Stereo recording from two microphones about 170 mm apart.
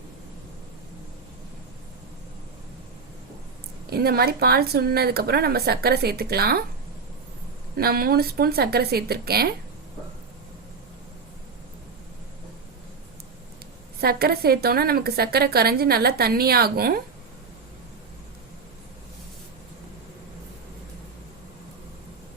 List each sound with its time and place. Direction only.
3.8 s a woman's voice: 65° right (ahead or behind)
7.8 s a woman's voice: 60° right (ahead or behind)
14.0 s a woman's voice: 65° right (ahead or behind)